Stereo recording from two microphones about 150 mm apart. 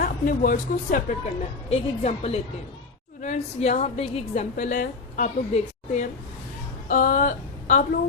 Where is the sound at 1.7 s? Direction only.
40° left (ahead or behind).